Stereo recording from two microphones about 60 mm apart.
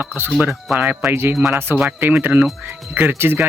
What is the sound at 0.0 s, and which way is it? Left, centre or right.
Speech, right.